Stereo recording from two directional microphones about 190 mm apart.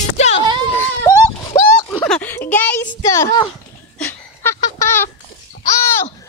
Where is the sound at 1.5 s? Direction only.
20° left (ahead or behind).